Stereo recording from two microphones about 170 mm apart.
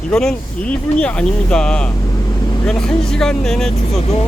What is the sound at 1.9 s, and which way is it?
Vehicle, 25° left (ahead or behind).